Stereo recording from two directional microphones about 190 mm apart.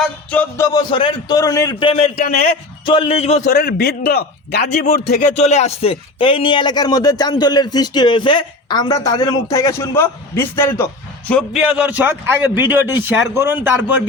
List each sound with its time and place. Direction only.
0.0 s speech: 5° left (ahead or behind)
1.9 s speech: 35° left (ahead or behind)
2.2 s a man's voice: 50° left (ahead or behind)
2.8 s a man's voice: 25° left (ahead or behind); by 4.9 s 55° left (ahead or behind)
5.2 s a man's voice: 35° left (ahead or behind); by 11.6 s 5° left (ahead or behind)
11.8 s a man's voice: 10° right (ahead or behind)